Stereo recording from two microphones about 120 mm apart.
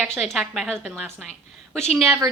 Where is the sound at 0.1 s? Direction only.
Centre (ahead or behind).